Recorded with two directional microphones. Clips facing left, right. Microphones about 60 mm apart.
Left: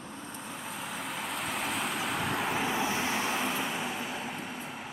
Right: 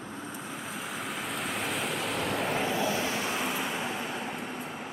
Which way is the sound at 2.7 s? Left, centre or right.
Left.